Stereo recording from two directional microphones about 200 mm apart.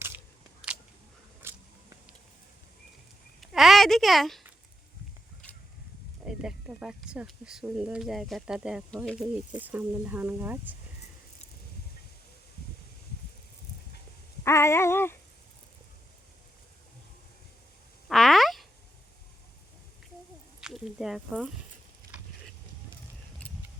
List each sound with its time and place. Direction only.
0.6 s single-lens reflex camera: centre (ahead or behind)
1.4 s biting: 10° right (ahead or behind)
3.4 s speech: centre (ahead or behind)
5.4 s a sound: 5° left (ahead or behind)
6.2 s speech: 5° right (ahead or behind)
14.4 s a sound: 15° left (ahead or behind)
18.1 s frog: centre (ahead or behind)
20.6 s speech: centre (ahead or behind)
22.0 s sizzle: 45° right (ahead or behind)